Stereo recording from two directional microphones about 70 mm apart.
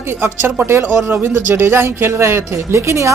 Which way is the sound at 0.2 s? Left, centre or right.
Right.